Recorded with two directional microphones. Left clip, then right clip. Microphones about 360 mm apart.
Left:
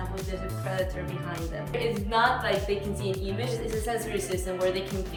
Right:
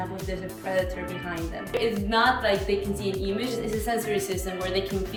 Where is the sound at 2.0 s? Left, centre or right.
Centre.